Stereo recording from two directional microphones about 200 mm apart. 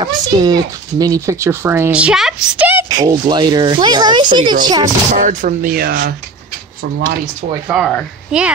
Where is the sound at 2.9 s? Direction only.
20° right (ahead or behind).